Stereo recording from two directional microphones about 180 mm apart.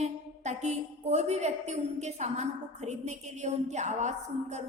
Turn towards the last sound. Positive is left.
turn(degrees=-40)  # may be behind; listen again after turning